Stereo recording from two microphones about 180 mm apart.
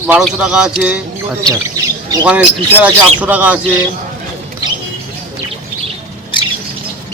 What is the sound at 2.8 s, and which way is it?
Speech, 10° right (ahead or behind).